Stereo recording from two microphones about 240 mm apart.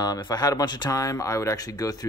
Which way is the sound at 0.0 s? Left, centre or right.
Centre.